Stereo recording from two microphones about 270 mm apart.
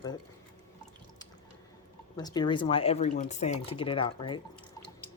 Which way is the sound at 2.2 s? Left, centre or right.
Centre.